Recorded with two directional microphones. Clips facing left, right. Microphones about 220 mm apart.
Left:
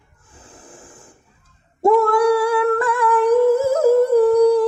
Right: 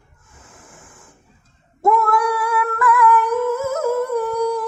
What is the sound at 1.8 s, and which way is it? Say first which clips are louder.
Humming: left 4 dB; 30° left (ahead or behind).